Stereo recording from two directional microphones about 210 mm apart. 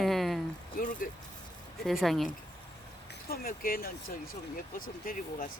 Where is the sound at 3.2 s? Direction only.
45° left (ahead or behind).